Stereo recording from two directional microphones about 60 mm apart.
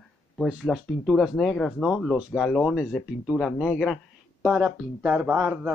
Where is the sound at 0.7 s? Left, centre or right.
Centre.